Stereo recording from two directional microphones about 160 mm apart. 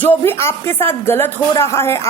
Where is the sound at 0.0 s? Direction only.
10° left (ahead or behind).